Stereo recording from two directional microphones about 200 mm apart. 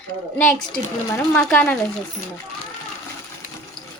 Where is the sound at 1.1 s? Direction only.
5° left (ahead or behind).